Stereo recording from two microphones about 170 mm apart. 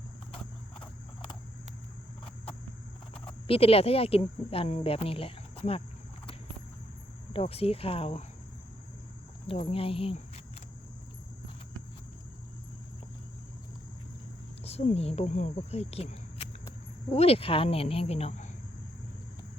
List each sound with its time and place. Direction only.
3.4 s speech: 35° left (ahead or behind)
7.3 s speech: 35° left (ahead or behind)
9.5 s speech: 35° left (ahead or behind)
14.6 s speech: 35° left (ahead or behind)